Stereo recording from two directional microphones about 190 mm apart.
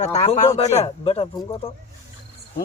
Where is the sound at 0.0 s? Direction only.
35° left (ahead or behind).